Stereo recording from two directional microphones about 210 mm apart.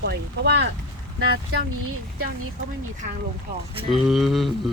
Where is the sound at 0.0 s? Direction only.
55° right (ahead or behind).